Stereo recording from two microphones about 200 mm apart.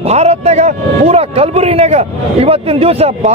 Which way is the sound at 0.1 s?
30° right (ahead or behind).